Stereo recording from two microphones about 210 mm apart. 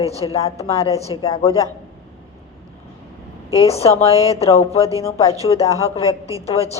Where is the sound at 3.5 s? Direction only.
30° left (ahead or behind).